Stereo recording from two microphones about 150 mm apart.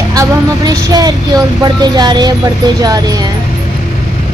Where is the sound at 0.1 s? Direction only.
25° right (ahead or behind).